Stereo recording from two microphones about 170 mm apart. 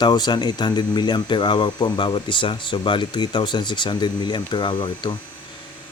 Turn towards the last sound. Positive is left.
turn(degrees=30)  # may be behind; listen again after turning